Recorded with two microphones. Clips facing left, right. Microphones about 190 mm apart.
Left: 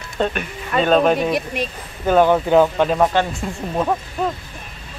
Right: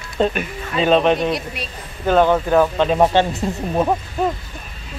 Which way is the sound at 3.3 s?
10° right (ahead or behind).